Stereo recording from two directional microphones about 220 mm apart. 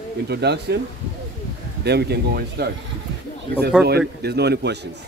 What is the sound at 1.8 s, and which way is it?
Speech, 50° right (ahead or behind).